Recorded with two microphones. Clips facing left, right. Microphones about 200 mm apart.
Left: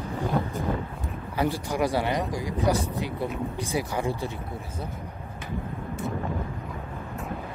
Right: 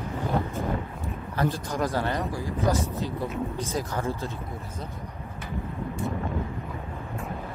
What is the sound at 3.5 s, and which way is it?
Speech, 10° left (ahead or behind).